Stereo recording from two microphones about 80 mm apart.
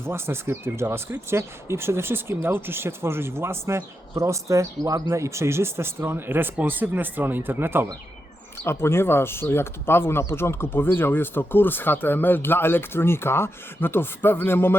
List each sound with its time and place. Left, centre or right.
0.0 s speech: right
8.6 s speech: left